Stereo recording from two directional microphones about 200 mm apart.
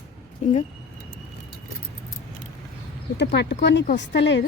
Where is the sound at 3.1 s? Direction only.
55° left (ahead or behind).